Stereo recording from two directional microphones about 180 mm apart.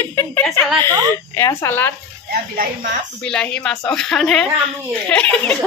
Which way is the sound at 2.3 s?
50° right (ahead or behind).